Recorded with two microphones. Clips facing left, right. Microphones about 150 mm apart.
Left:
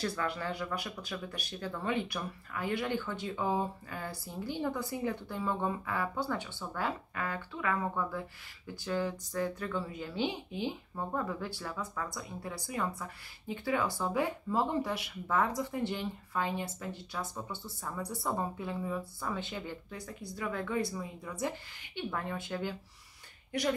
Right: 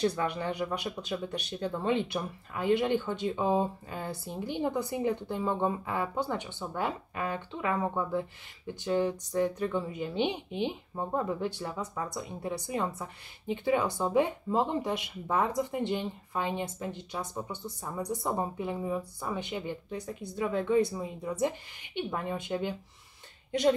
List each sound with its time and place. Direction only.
0.0 s speech: 20° right (ahead or behind)